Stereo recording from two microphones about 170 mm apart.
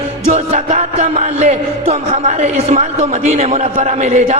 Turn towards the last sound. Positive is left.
turn(degrees=-40)  # may be behind; listen again after turning